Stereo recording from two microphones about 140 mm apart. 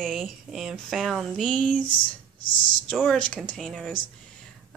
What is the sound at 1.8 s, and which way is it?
Speech, 35° left (ahead or behind).